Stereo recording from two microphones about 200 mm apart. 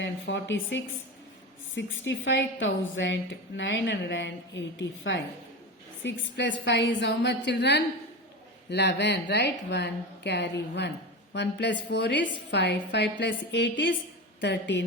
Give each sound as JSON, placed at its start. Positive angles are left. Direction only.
{"t": 0.0, "sound": "a woman's voice", "side_deg": 65}